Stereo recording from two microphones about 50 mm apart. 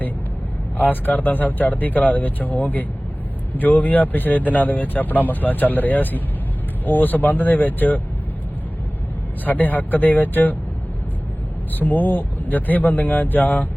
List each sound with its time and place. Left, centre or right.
0.8 s speech: left
9.4 s speech: left
11.7 s speech: left